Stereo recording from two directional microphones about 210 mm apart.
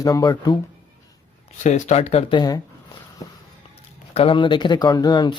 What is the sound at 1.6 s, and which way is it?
Speech, 35° left (ahead or behind).